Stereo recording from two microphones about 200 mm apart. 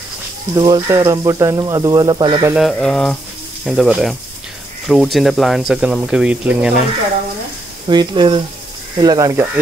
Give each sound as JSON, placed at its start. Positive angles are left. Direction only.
{"t": 0.6, "sound": "speech", "side_deg": -20}
{"t": 2.5, "sound": "speech", "side_deg": 0}
{"t": 7.9, "sound": "speech", "side_deg": -25}